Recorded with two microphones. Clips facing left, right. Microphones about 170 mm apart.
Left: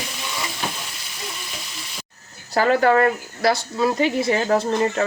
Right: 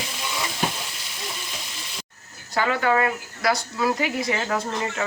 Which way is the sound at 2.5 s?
40° left (ahead or behind).